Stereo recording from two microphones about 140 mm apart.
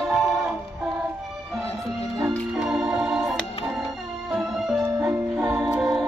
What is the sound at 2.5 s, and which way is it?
Music, 5° right (ahead or behind).